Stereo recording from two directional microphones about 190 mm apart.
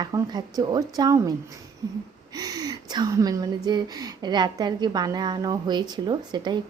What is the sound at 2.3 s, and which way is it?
Speech, 20° right (ahead or behind).